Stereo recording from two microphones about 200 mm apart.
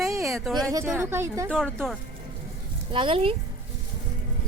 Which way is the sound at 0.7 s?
15° right (ahead or behind).